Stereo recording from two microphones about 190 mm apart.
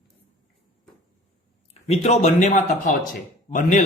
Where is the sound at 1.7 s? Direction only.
35° left (ahead or behind).